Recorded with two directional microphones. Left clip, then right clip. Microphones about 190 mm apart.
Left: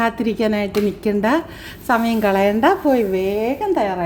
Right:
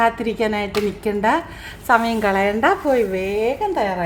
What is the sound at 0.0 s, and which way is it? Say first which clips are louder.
A woman's voice: right 1 dB; centre (ahead or behind).